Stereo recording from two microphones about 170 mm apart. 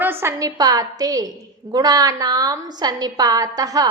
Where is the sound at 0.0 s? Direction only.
15° right (ahead or behind).